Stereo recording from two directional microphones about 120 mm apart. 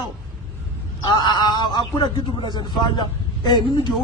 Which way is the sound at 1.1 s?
35° left (ahead or behind).